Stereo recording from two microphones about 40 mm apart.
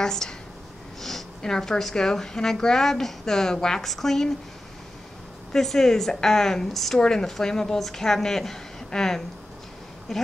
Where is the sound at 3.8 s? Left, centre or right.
Centre.